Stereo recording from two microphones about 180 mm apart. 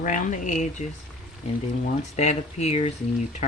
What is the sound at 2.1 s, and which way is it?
Speech, 35° left (ahead or behind).